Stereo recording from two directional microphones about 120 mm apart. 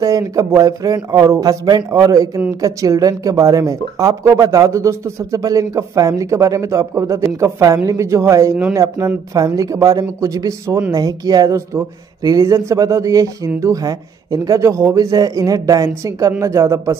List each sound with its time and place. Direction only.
0.0 s speech: 30° right (ahead or behind)